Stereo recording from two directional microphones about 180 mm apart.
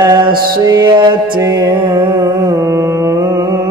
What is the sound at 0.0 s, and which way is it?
Music, 25° right (ahead or behind).